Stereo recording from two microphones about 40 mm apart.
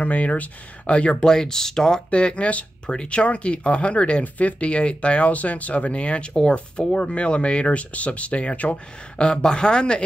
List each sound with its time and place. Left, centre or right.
0.0 s speech: left
1.2 s speech: centre
2.0 s speech: left
9.2 s speech: left